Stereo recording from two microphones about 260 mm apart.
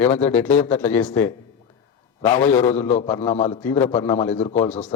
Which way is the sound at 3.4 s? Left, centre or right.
Left.